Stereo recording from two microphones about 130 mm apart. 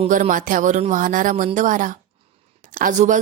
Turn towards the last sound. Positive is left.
turn(degrees=-70)  # may be behind; listen again after turning